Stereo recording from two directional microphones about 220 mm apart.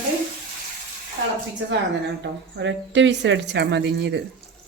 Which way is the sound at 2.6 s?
55° right (ahead or behind).